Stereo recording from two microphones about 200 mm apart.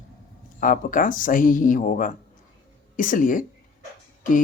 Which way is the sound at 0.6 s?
40° left (ahead or behind).